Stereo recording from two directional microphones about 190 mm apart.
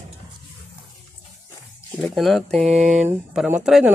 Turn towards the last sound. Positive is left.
turn(degrees=0)  # may be behind; listen again after turning